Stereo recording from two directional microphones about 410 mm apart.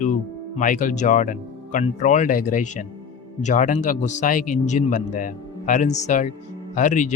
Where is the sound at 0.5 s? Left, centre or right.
Centre.